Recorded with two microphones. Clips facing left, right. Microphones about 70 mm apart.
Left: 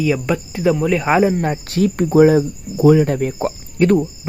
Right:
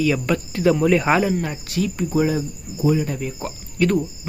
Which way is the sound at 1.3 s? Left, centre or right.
Left.